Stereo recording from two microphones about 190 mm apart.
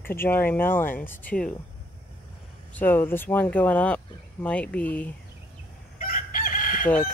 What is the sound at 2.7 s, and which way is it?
Speech, 10° left (ahead or behind).